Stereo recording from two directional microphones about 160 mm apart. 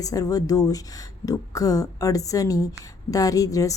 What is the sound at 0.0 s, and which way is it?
A woman's voice, 20° left (ahead or behind).